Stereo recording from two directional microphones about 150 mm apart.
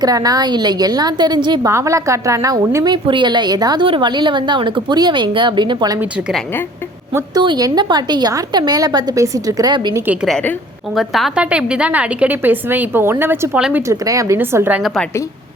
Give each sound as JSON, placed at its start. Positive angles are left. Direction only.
{"t": 0.0, "sound": "a woman's voice", "side_deg": -25}
{"t": 7.4, "sound": "a woman's voice", "side_deg": -30}
{"t": 10.2, "sound": "a woman's voice", "side_deg": 5}
{"t": 13.8, "sound": "a woman's voice", "side_deg": -20}